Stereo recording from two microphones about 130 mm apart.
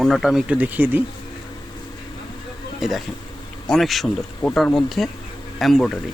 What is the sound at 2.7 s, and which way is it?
Speech, centre (ahead or behind).